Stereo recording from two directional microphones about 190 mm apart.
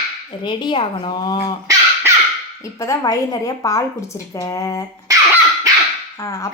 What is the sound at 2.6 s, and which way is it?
A woman's voice, 15° left (ahead or behind).